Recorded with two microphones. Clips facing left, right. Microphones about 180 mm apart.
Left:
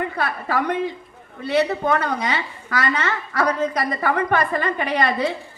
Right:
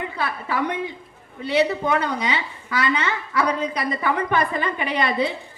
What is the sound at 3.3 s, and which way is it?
A woman's voice, 50° left (ahead or behind).